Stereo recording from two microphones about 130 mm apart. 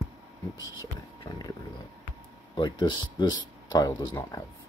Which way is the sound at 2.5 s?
35° left (ahead or behind).